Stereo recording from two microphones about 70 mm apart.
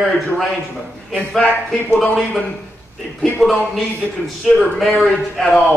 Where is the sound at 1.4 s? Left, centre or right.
Left.